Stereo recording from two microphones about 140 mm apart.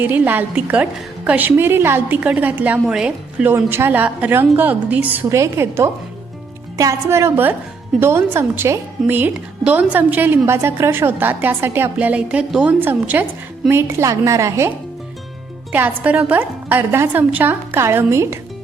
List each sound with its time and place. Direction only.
0.0 s a woman's voice: 15° right (ahead or behind)
15.7 s a woman's voice: 15° right (ahead or behind)